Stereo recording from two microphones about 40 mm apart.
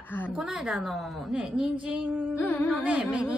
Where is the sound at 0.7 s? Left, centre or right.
Centre.